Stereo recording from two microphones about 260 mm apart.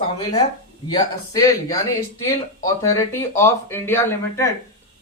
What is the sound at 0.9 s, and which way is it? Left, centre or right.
Speech, centre.